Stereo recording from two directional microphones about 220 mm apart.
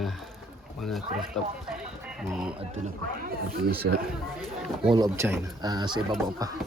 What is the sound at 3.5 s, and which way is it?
Speech, 45° right (ahead or behind).